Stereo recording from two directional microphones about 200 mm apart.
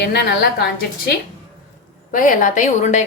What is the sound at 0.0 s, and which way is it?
Speech, 55° left (ahead or behind).